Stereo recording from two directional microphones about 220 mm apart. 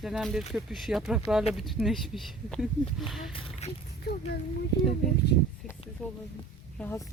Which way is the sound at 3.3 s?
25° left (ahead or behind).